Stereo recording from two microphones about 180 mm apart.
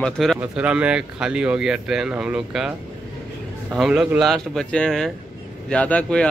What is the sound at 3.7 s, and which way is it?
A man's voice, 5° right (ahead or behind).